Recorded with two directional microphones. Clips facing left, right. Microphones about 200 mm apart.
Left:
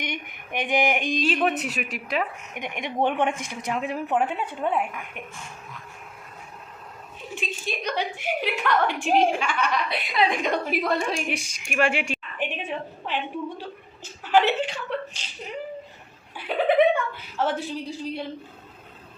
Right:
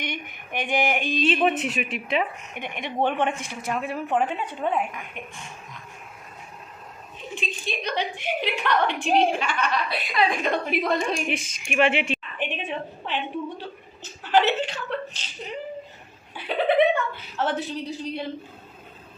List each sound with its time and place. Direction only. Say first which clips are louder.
0.0 s a sound: even; 15° left (ahead or behind)
1.4 s a woman's voice: right 2 dB; centre (ahead or behind)
2.6 s a woman's voice: even; 15° left (ahead or behind)
7.3 s a woman's voice: even; 10° left (ahead or behind)
10.7 s a woman's voice: right 1 dB; centre (ahead or behind)
16.3 s a woman's voice: even; 10° left (ahead or behind)